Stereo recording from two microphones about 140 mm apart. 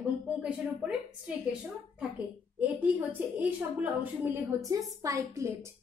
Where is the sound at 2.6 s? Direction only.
10° right (ahead or behind).